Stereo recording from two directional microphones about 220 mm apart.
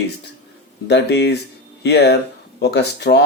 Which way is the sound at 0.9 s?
50° left (ahead or behind).